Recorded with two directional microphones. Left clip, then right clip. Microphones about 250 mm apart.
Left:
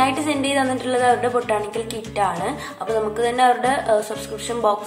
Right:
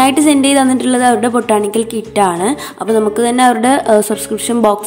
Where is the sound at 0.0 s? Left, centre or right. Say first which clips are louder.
Right 9 dB; right.